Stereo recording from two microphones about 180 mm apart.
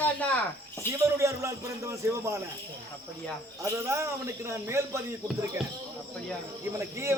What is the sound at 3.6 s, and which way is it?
A man's voice, 15° right (ahead or behind).